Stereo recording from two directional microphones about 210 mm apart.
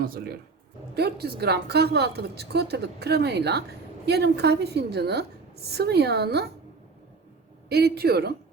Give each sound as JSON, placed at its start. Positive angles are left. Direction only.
{"t": 0.0, "sound": "a woman's voice", "side_deg": -45}
{"t": 7.7, "sound": "a woman's voice", "side_deg": -50}